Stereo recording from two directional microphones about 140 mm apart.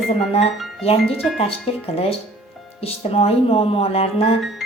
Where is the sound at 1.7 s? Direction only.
45° left (ahead or behind).